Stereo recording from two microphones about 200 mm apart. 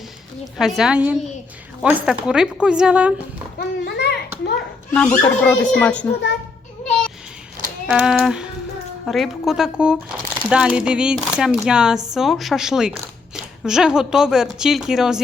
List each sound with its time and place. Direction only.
0.6 s speech: centre (ahead or behind)
3.6 s a child's voice: 55° left (ahead or behind)
4.9 s speech: 5° left (ahead or behind)
7.9 s speech: 5° right (ahead or behind)